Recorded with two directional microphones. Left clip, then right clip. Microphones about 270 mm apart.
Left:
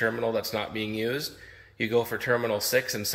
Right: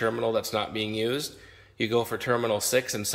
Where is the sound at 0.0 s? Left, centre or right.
Centre.